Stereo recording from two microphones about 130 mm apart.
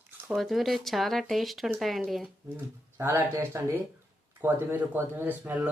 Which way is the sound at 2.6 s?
20° right (ahead or behind).